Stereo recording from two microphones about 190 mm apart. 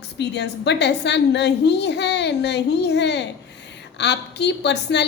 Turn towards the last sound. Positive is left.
turn(degrees=65)  # may be behind; listen again after turning